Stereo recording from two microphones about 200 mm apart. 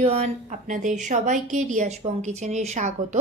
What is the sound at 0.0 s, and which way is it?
A woman's voice, 35° right (ahead or behind).